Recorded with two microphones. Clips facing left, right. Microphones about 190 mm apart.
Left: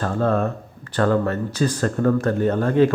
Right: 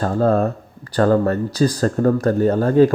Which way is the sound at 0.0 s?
35° right (ahead or behind).